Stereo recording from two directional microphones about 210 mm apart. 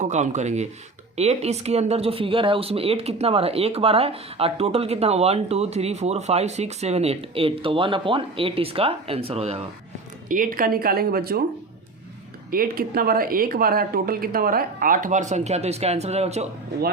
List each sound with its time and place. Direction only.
0.0 s speech: 35° right (ahead or behind)
10.2 s a woman's voice: 40° right (ahead or behind)
12.5 s a woman's voice: 45° right (ahead or behind)